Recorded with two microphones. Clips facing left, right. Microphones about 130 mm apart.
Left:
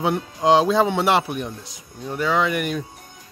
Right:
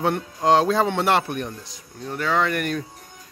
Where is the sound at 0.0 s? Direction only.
5° left (ahead or behind).